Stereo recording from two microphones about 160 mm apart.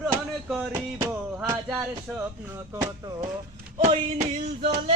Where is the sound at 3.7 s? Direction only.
45° right (ahead or behind).